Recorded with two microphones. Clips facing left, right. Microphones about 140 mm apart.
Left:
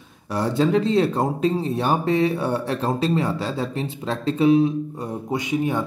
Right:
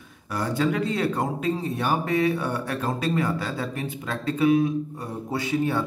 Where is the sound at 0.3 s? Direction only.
25° left (ahead or behind).